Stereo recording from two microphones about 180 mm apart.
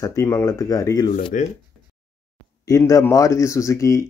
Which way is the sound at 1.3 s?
45° left (ahead or behind).